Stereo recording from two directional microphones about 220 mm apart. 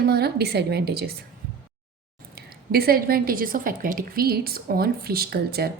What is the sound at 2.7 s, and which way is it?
A woman's voice, 45° right (ahead or behind).